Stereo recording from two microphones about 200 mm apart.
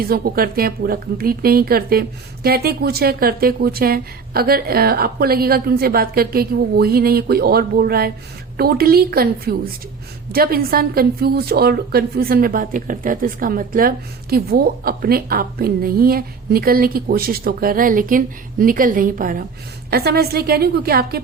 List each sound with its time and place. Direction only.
0.0 s a woman's voice: 50° right (ahead or behind)